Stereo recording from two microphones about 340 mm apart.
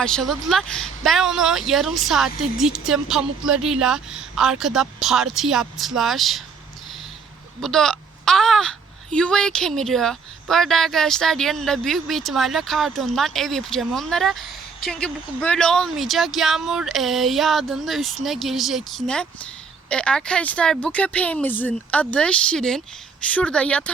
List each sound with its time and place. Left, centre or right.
0.0 s speech: centre
7.6 s speech: centre